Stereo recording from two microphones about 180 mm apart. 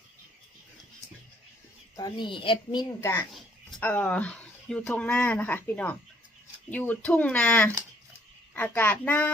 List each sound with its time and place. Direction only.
2.0 s a woman's voice: 25° left (ahead or behind)
3.0 s speech: 15° left (ahead or behind)